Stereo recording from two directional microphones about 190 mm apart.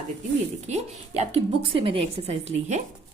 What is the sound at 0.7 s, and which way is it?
A woman's voice, 35° right (ahead or behind).